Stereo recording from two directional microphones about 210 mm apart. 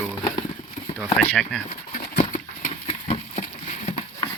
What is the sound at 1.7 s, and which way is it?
Horse, 30° left (ahead or behind).